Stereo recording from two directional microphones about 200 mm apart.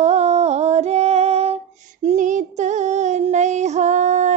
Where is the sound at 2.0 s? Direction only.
40° right (ahead or behind).